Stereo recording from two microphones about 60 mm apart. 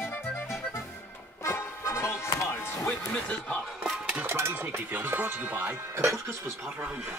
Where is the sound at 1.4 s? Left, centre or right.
Left.